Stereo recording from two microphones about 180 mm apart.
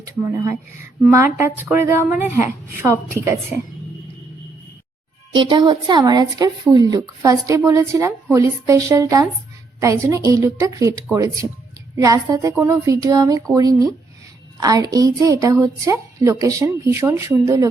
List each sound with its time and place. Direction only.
0.0 s a woman's voice: 15° right (ahead or behind)
5.3 s a woman's voice: 25° right (ahead or behind)